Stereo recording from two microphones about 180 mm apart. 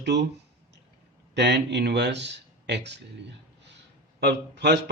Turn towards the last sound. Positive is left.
turn(degrees=-70)  # may be behind; listen again after turning